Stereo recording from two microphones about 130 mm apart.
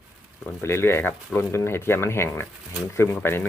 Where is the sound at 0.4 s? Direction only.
20° left (ahead or behind).